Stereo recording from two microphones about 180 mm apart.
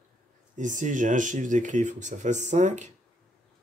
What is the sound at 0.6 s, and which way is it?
Speech, 45° right (ahead or behind).